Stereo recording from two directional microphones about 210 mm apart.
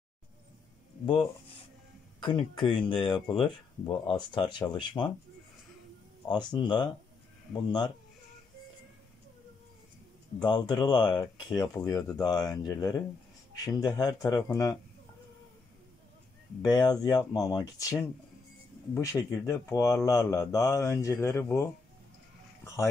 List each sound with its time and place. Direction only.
2.1 s speech: 20° left (ahead or behind)
6.2 s speech: 20° left (ahead or behind)
10.4 s speech: 20° left (ahead or behind)
16.7 s speech: 20° left (ahead or behind)